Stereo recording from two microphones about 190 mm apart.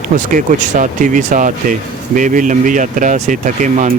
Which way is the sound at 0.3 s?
45° right (ahead or behind).